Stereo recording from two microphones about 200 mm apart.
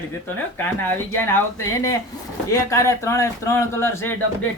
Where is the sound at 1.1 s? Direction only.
10° left (ahead or behind).